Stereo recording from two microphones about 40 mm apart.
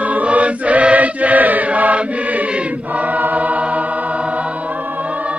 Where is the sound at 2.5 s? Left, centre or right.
Right.